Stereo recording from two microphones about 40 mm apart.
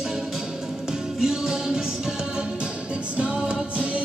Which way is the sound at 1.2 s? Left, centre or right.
Centre.